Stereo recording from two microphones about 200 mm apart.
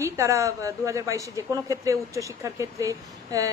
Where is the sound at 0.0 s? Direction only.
15° right (ahead or behind).